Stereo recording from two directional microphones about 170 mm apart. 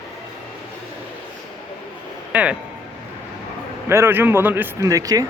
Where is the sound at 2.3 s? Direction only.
5° right (ahead or behind).